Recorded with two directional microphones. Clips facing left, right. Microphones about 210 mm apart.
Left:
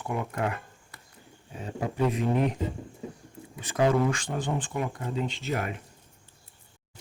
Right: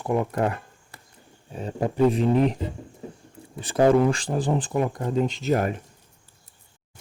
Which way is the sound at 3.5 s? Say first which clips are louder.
Right 6 dB; 30° right (ahead or behind).